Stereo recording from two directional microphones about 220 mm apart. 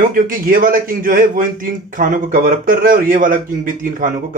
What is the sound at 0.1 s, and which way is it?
Speech, 40° right (ahead or behind).